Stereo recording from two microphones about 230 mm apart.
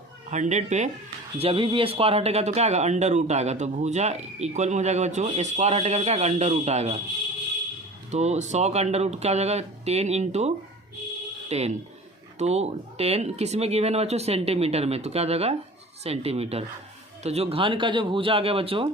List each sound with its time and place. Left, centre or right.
0.3 s speech: right
8.1 s speech: right